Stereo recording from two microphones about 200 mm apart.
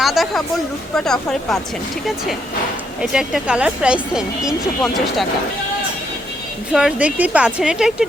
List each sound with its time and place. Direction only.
0.0 s speech: centre (ahead or behind)
3.0 s speech: 5° right (ahead or behind)
6.7 s speech: 5° right (ahead or behind)